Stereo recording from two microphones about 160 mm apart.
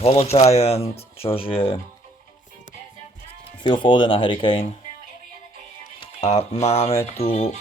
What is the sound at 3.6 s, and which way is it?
Speech, 30° left (ahead or behind).